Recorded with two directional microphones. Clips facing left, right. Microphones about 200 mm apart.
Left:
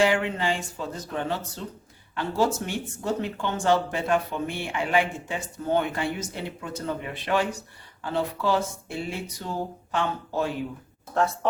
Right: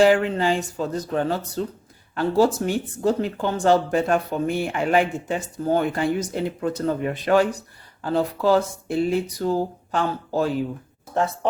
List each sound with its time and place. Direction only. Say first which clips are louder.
0.0 s speech: right 6 dB; 40° right (ahead or behind)